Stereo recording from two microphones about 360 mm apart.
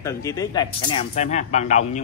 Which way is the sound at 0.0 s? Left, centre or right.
Centre.